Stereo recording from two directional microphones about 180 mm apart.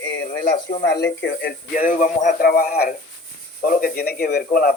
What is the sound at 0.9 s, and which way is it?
Speech, 70° left (ahead or behind).